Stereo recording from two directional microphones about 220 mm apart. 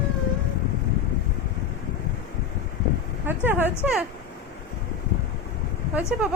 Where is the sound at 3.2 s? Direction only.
10° right (ahead or behind).